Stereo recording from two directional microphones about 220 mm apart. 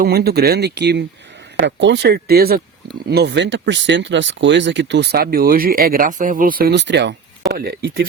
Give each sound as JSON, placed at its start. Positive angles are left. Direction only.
{"t": 0.0, "sound": "speech", "side_deg": -45}